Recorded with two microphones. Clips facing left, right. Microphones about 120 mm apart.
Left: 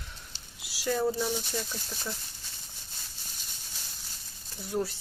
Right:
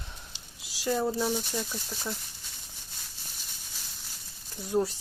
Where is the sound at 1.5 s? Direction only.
10° right (ahead or behind).